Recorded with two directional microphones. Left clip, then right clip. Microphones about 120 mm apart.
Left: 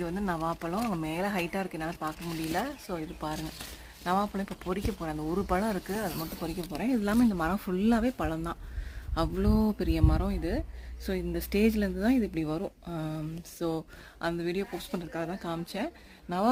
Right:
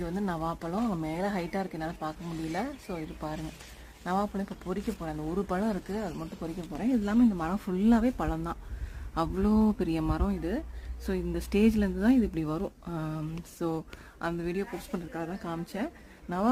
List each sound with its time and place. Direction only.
0.2 s speech: 45° left (ahead or behind)
1.0 s speech: 25° left (ahead or behind)
6.8 s speech: 25° left (ahead or behind)
7.5 s speech: 10° left (ahead or behind)
14.9 s speech: 25° left (ahead or behind)